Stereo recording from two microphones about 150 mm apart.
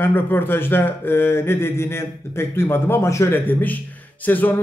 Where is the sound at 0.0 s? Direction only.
15° left (ahead or behind).